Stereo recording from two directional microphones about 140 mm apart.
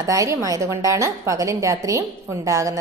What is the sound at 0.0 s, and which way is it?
A woman's voice, 25° right (ahead or behind).